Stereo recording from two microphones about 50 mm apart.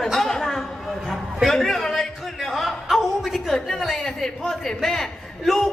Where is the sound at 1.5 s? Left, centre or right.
Centre.